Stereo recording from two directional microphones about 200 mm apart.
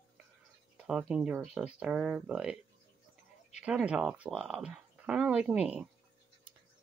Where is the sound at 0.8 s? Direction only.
5° right (ahead or behind).